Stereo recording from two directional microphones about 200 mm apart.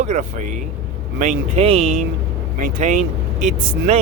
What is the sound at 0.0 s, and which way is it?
Speech, 35° right (ahead or behind).